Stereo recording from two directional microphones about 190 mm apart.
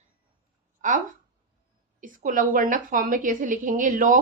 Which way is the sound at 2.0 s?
45° right (ahead or behind).